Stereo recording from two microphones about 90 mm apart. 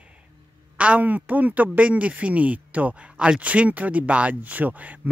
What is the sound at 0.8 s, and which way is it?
Speech, 15° right (ahead or behind).